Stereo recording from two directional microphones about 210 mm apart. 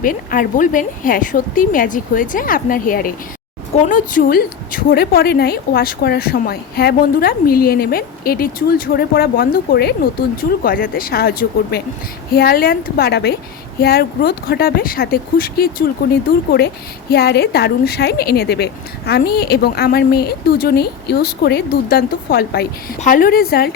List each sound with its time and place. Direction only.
0.0 s a woman's voice: 40° left (ahead or behind)